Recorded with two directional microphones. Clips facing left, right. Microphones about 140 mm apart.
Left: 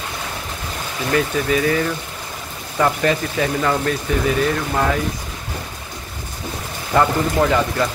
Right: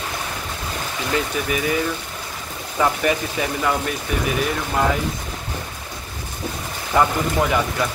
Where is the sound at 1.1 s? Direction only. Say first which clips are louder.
Left 5 dB; 15° right (ahead or behind).